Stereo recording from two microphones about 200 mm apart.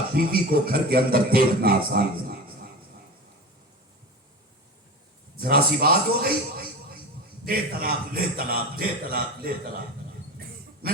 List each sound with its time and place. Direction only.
0.2 s speech: 50° right (ahead or behind)
5.4 s a man's voice: 50° right (ahead or behind)
10.3 s a sound: 50° right (ahead or behind)